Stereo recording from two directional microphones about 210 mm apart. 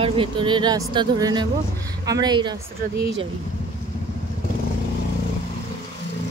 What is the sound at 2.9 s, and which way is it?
Speech, 50° right (ahead or behind).